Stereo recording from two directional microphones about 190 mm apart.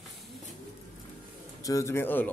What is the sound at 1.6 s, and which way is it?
Speech, 15° left (ahead or behind).